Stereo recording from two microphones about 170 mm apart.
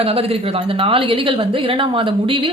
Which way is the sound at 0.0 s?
35° right (ahead or behind).